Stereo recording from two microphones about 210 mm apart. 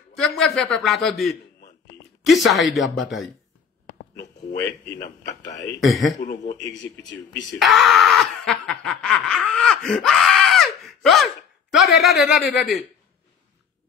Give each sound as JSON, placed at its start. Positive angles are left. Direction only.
{"t": 0.1, "sound": "a man's voice", "side_deg": 0}
{"t": 3.8, "sound": "a sound", "side_deg": 45}
{"t": 4.6, "sound": "a man's voice", "side_deg": 15}
{"t": 5.8, "sound": "speech", "side_deg": 0}
{"t": 6.2, "sound": "a man's voice", "side_deg": 35}
{"t": 6.8, "sound": "speech", "side_deg": 60}
{"t": 7.5, "sound": "snicker", "side_deg": 0}
{"t": 11.7, "sound": "speech", "side_deg": 0}